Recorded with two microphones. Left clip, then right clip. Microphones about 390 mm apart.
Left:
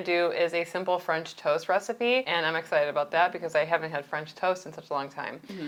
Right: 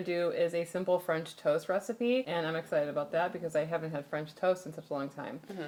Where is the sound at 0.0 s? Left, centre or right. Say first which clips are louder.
Left 5 dB; left.